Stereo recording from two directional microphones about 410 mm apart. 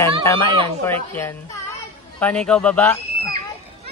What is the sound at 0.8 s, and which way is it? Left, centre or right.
A man's voice, centre.